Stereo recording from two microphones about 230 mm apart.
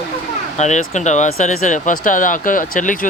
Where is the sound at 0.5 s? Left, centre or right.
Left.